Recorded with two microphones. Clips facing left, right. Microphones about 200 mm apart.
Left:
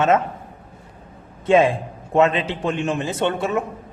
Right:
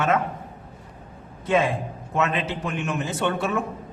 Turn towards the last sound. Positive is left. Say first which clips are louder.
# left 3 dB
turn(degrees=20)  # may be behind; listen again after turning